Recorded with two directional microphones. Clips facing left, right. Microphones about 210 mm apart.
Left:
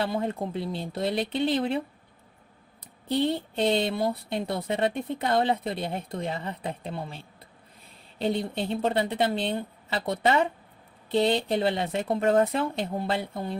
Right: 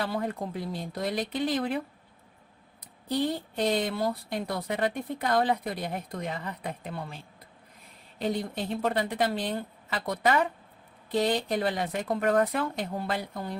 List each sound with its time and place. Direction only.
0.0 s speech: 25° left (ahead or behind)
3.1 s speech: 25° left (ahead or behind)
8.2 s speech: 25° left (ahead or behind)